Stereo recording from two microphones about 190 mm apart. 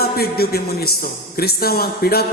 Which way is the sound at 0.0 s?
55° left (ahead or behind).